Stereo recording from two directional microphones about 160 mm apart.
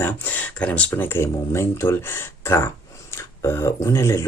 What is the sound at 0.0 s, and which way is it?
Speech, 10° left (ahead or behind).